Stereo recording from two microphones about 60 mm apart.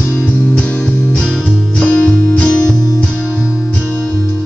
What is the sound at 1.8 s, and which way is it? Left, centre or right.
Music, centre.